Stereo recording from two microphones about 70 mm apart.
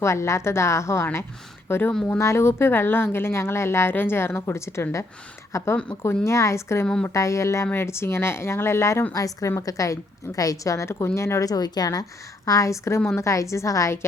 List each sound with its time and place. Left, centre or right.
0.0 s a woman's voice: left
6.8 s speech: centre
7.1 s a woman's voice: left
9.1 s a woman's voice: left
11.4 s speech: left
12.5 s a woman's voice: left